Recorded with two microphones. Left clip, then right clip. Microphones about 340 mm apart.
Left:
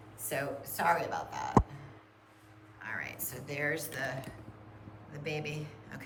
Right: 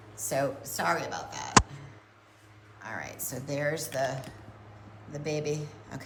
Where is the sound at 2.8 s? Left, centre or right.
Centre.